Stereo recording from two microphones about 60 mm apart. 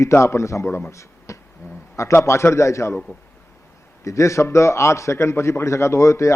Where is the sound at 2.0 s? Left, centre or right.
Left.